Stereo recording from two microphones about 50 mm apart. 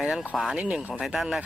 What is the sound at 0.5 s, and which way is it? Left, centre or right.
Speech, right.